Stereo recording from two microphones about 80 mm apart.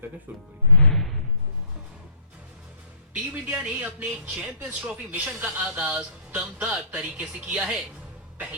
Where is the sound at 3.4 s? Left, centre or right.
Right.